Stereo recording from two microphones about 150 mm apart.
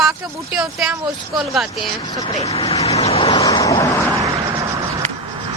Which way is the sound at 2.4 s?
40° left (ahead or behind).